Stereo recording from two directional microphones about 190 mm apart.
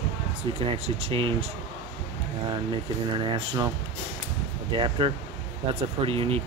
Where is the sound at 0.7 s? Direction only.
30° right (ahead or behind).